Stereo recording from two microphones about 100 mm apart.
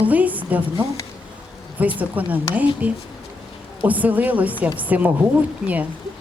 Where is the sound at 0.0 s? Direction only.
15° right (ahead or behind).